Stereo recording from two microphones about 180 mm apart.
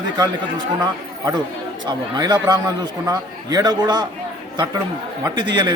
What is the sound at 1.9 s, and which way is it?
A man's voice, 25° right (ahead or behind).